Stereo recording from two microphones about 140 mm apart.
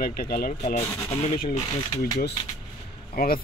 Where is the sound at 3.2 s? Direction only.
90° left.